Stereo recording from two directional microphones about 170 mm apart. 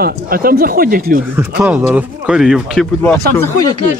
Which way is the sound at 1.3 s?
10° right (ahead or behind).